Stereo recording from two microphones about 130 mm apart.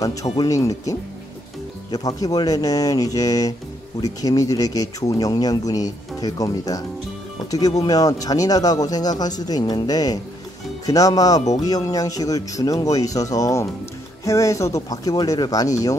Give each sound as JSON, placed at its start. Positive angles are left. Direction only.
{"t": 0.0, "sound": "speech", "side_deg": 25}
{"t": 7.8, "sound": "speech", "side_deg": 30}